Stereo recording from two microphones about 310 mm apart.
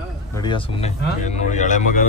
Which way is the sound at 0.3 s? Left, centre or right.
Centre.